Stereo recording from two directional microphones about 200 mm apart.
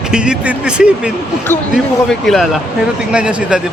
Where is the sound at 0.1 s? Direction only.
5° right (ahead or behind).